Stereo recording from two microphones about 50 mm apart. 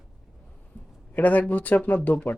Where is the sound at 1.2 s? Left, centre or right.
Left.